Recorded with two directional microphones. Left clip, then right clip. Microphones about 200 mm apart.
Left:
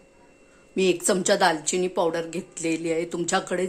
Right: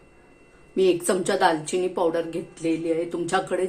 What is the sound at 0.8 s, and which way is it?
Speech, 30° left (ahead or behind).